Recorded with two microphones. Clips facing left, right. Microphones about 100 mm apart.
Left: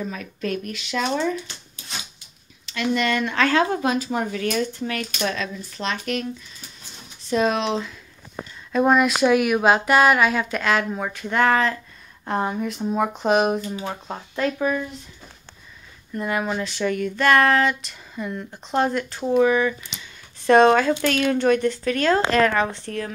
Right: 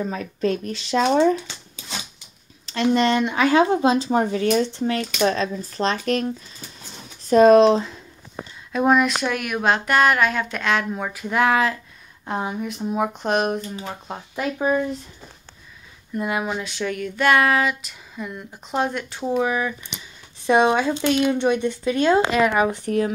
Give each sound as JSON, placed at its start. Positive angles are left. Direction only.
{"t": 0.0, "sound": "speech", "side_deg": -35}
{"t": 2.6, "sound": "speech", "side_deg": -35}
{"t": 8.7, "sound": "speech", "side_deg": 0}
{"t": 16.2, "sound": "speech", "side_deg": -10}